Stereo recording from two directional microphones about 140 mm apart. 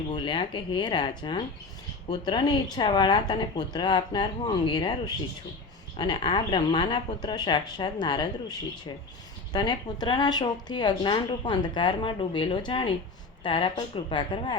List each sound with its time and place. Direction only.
0.2 s speech: 35° left (ahead or behind)